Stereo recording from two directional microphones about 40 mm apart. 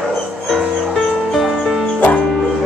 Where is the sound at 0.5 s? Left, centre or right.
Centre.